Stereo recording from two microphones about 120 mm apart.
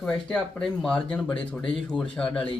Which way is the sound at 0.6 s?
5° left (ahead or behind).